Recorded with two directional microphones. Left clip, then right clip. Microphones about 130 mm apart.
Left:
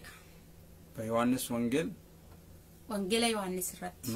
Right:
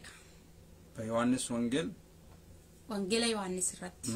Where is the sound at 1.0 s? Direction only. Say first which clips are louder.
Left 1 dB; 20° left (ahead or behind).